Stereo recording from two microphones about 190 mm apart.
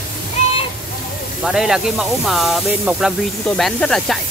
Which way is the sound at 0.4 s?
35° left (ahead or behind).